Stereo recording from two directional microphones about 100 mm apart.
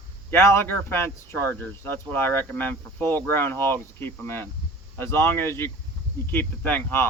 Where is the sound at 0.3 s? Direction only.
25° left (ahead or behind).